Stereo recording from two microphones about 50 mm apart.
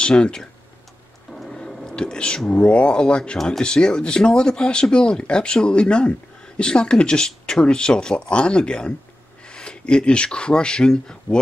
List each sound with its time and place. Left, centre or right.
0.0 s speech: centre
1.3 s music: centre
1.6 s a sound: centre
2.0 s speech: centre